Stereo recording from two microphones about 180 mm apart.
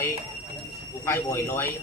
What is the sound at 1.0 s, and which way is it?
Speech, 15° left (ahead or behind).